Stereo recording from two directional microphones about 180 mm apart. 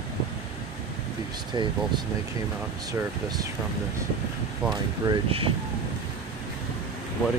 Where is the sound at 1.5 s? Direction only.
20° right (ahead or behind).